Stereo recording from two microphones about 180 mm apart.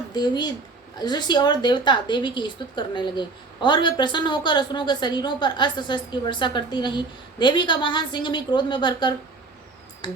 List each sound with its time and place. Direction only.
0.1 s a woman's voice: 25° left (ahead or behind)